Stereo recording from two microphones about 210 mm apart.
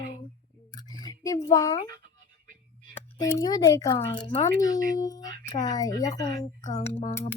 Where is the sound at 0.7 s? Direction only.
20° left (ahead or behind).